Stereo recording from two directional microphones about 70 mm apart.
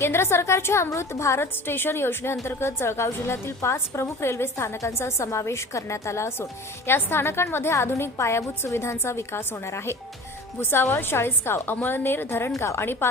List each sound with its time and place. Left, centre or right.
0.0 s a woman's voice: left